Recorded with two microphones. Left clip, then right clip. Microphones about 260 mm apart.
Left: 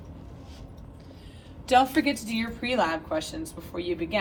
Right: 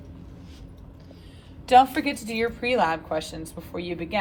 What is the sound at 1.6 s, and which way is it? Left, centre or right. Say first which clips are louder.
Speech: right 4 dB; right.